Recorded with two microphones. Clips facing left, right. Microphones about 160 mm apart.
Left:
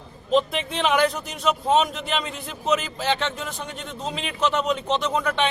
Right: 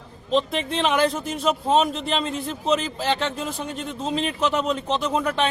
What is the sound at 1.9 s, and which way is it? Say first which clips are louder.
Speech: right 2 dB; 30° right (ahead or behind).